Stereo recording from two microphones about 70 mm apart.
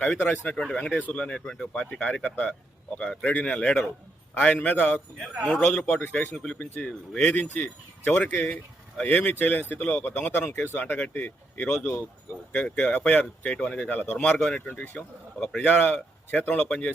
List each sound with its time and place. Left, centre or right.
0.2 s speech: left
0.5 s speech: centre
0.9 s speech: left
3.2 s speech: centre
6.3 s speech: centre
6.6 s speech: left; by 14.6 s centre
14.7 s a man's voice: left